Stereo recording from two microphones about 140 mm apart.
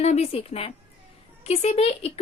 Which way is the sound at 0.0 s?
50° left (ahead or behind).